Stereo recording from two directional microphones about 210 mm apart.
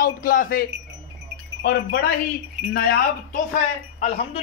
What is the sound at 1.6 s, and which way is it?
Speech, 50° left (ahead or behind).